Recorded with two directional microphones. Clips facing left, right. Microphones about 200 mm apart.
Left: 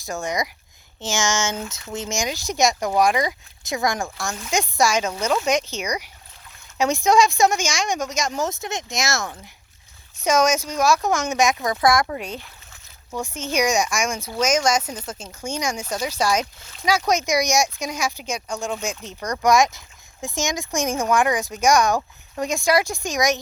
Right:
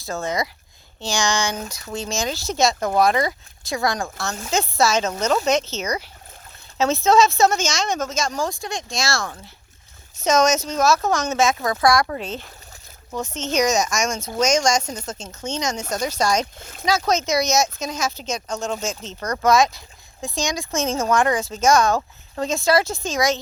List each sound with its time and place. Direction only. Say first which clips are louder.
0.0 s speech: right 1 dB; 15° left (ahead or behind)